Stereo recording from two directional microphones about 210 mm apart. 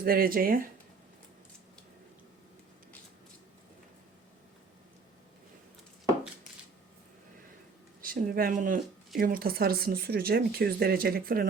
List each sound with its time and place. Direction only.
0.0 s speech: 45° right (ahead or behind)
8.0 s speech: 45° right (ahead or behind)